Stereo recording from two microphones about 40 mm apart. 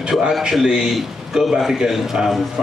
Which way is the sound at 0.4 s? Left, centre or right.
Centre.